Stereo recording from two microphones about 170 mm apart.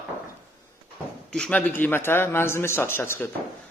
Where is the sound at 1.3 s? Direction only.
5° left (ahead or behind).